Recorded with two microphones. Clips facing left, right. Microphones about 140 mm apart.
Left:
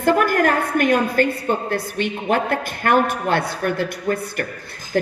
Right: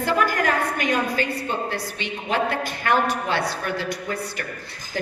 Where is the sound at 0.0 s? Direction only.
50° left (ahead or behind).